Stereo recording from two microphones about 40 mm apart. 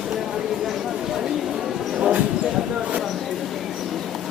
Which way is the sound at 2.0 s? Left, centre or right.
Right.